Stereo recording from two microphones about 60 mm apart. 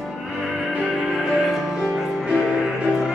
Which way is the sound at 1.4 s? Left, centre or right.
Centre.